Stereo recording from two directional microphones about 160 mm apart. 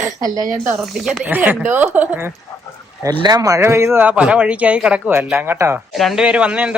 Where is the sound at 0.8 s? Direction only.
Centre (ahead or behind).